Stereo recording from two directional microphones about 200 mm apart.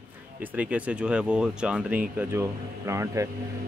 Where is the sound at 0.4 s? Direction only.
10° right (ahead or behind).